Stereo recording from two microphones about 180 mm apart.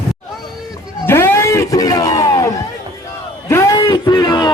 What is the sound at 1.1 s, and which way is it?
Music, 15° left (ahead or behind).